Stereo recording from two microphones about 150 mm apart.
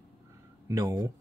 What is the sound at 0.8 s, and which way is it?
Speech, 30° right (ahead or behind).